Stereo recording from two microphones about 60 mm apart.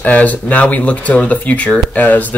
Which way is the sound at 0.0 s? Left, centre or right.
Left.